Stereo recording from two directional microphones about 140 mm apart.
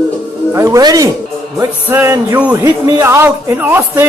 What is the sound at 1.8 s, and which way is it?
A man's voice, 15° right (ahead or behind).